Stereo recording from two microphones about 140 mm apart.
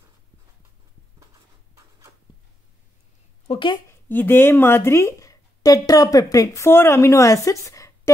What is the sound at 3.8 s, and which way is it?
Speech, 15° left (ahead or behind).